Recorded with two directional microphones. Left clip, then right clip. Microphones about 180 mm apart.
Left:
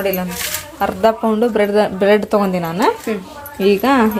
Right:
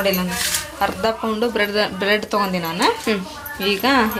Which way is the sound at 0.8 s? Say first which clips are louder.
Left 6 dB; 55° left (ahead or behind).